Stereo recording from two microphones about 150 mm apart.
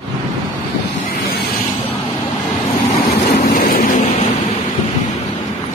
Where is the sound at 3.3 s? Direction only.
80° left.